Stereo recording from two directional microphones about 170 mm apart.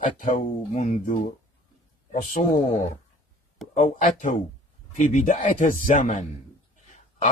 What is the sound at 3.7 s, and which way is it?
A man's voice, 50° left (ahead or behind).